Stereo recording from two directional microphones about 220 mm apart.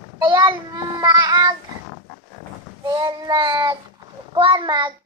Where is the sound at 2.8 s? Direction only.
20° right (ahead or behind).